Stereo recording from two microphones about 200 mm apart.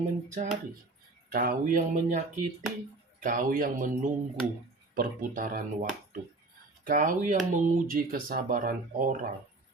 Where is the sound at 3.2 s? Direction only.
45° right (ahead or behind).